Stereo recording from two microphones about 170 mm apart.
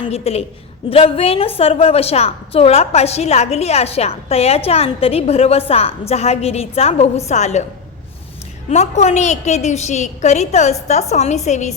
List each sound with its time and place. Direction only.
0.1 s a woman's voice: 35° left (ahead or behind)
8.7 s a woman's voice: 40° left (ahead or behind)